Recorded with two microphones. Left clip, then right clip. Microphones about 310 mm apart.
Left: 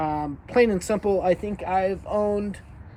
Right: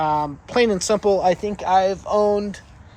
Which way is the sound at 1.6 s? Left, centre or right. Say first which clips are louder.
Right 6 dB; right.